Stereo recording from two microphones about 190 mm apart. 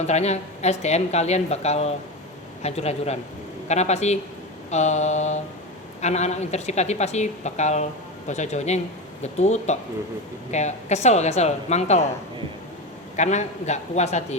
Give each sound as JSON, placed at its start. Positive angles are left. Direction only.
{"t": 0.0, "sound": "a woman's voice", "side_deg": 35}
{"t": 13.1, "sound": "a woman's voice", "side_deg": 35}